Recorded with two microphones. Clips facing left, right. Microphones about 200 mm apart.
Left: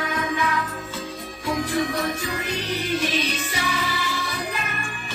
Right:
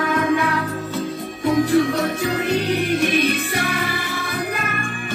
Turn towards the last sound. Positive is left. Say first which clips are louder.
# right 5 dB
turn(degrees=-50)  # may be behind; listen again after turning